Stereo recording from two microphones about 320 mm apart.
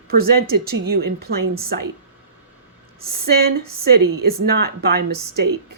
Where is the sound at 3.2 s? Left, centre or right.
Right.